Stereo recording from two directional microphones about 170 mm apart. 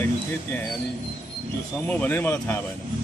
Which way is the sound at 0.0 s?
10° left (ahead or behind).